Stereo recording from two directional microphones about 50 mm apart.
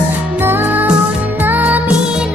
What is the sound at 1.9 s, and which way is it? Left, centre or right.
Music, centre.